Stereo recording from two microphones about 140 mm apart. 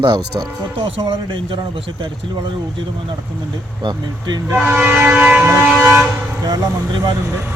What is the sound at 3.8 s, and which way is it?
Speech, 30° right (ahead or behind).